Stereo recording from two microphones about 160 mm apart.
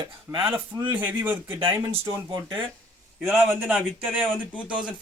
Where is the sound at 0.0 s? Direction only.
25° right (ahead or behind).